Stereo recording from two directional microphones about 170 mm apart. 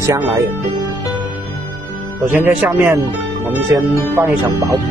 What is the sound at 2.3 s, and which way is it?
Speech, 10° right (ahead or behind).